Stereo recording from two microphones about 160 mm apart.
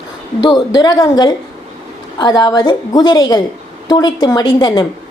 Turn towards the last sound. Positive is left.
turn(degrees=25)  # may be behind; listen again after turning